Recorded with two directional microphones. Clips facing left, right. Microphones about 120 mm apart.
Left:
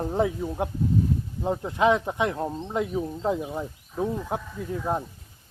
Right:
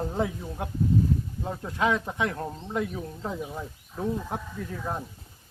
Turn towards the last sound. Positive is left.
turn(degrees=15)  # may be behind; listen again after turning